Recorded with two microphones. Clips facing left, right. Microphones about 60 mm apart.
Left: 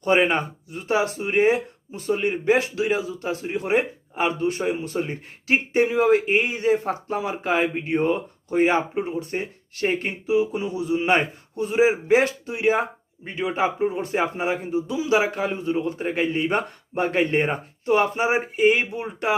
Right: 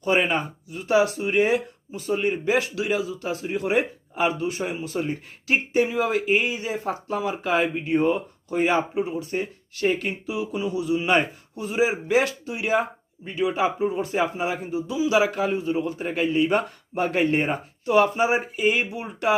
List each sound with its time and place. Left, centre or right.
0.0 s a man's voice: left
0.9 s speech: left
1.9 s a man's voice: left
4.3 s a man's voice: left